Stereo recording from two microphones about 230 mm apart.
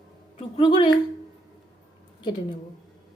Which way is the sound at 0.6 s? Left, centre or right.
Left.